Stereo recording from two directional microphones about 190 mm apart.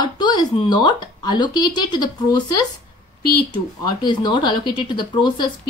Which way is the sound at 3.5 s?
25° left (ahead or behind).